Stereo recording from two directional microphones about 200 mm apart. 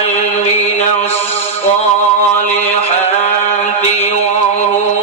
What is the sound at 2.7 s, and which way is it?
Mantra, 30° left (ahead or behind).